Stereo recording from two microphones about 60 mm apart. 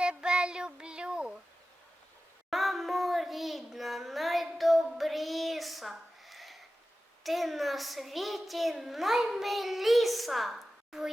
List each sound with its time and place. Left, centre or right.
0.0 s child singing: centre
2.5 s child singing: centre
7.3 s a child's voice: centre